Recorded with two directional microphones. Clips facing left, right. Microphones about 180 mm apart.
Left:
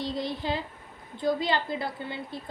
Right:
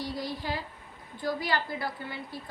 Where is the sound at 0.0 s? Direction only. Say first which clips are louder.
Left 3 dB; 20° left (ahead or behind).